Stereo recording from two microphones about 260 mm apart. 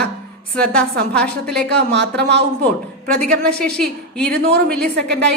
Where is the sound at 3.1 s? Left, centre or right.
Centre.